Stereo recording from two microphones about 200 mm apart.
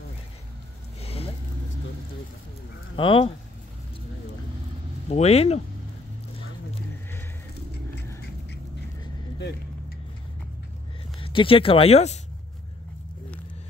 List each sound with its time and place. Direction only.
1.0 s vehicle: 30° left (ahead or behind)
3.0 s speech: 25° left (ahead or behind)
5.1 s speech: 30° left (ahead or behind)
11.1 s speech: 25° left (ahead or behind)